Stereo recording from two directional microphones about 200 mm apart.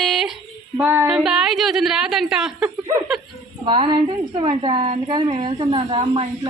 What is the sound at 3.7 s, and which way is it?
A woman's voice, 25° right (ahead or behind).